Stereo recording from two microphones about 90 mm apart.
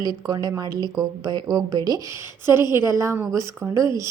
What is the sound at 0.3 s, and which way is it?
A woman's voice, 45° right (ahead or behind).